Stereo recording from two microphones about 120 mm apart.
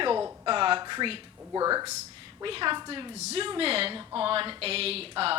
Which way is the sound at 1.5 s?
30° right (ahead or behind).